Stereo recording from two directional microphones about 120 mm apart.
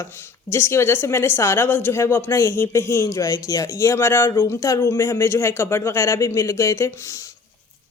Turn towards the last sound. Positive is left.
turn(degrees=25)  # may be behind; listen again after turning